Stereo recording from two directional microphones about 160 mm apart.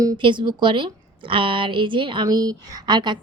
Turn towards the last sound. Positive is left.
turn(degrees=-25)  # may be behind; listen again after turning